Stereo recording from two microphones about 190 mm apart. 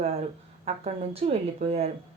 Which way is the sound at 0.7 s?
30° right (ahead or behind).